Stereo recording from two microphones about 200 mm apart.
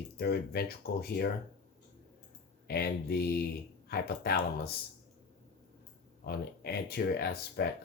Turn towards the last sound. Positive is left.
turn(degrees=50)  # may be behind; listen again after turning